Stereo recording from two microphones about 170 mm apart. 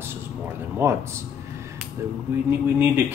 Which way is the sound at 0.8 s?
15° right (ahead or behind).